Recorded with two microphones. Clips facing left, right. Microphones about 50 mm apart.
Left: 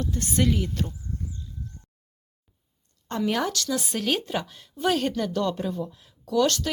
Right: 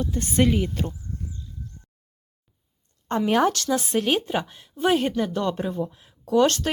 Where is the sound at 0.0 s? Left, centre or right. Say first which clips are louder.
Right 3 dB; centre.